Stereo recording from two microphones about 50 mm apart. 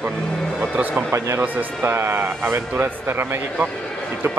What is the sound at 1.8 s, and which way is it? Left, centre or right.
Speech, right.